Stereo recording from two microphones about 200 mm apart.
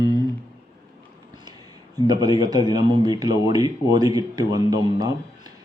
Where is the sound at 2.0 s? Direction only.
20° right (ahead or behind).